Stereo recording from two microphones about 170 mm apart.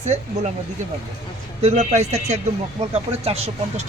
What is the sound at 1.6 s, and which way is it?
Speech, 40° right (ahead or behind).